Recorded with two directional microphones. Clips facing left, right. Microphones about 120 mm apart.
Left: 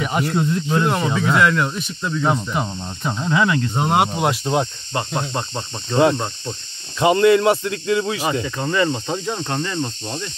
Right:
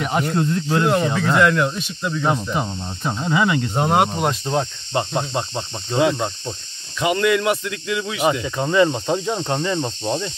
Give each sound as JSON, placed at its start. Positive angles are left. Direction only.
{"t": 0.0, "sound": "speech", "side_deg": 0}
{"t": 3.8, "sound": "speech", "side_deg": 5}
{"t": 4.9, "sound": "insect", "side_deg": -25}
{"t": 5.9, "sound": "speech", "side_deg": -10}
{"t": 7.0, "sound": "speech", "side_deg": 30}
{"t": 8.2, "sound": "speech", "side_deg": -15}